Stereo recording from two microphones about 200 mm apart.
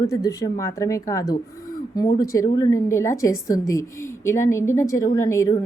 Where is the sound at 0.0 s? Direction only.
15° left (ahead or behind).